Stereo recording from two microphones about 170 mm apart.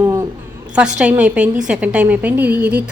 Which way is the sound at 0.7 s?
5° right (ahead or behind).